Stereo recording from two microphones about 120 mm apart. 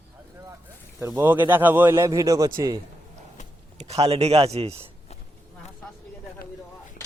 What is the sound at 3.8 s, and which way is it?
Speech, 60° right (ahead or behind).